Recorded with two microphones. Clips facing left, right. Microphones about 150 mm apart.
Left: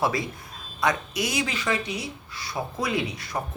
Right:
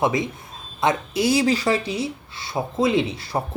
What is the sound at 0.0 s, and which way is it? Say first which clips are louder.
Speech: right 4 dB; 20° right (ahead or behind).